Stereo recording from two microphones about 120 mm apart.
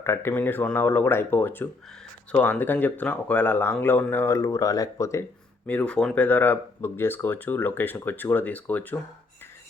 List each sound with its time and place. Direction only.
0.0 s speech: 20° left (ahead or behind)
5.6 s speech: 10° left (ahead or behind)